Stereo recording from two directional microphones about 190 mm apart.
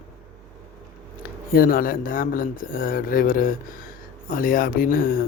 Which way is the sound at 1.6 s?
50° left (ahead or behind).